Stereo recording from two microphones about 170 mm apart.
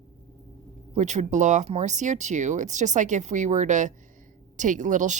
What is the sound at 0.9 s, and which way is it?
A woman's voice, 45° right (ahead or behind).